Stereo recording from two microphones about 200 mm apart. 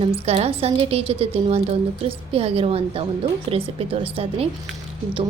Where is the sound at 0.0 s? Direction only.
30° right (ahead or behind).